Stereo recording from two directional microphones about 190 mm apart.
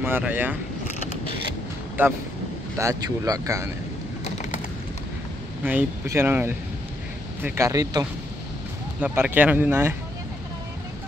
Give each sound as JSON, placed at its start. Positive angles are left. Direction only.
{"t": 0.0, "sound": "speech", "side_deg": -10}
{"t": 2.8, "sound": "speech", "side_deg": -15}
{"t": 4.2, "sound": "a sound", "side_deg": 40}
{"t": 5.6, "sound": "speech", "side_deg": -10}